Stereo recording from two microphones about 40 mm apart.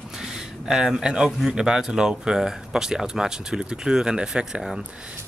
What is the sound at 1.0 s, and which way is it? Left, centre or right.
Speech, centre.